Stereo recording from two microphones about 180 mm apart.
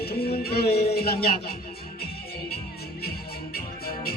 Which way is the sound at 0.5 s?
60° left (ahead or behind).